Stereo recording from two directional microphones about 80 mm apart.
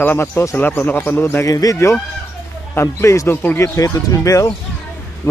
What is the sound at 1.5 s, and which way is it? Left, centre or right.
Speech, left.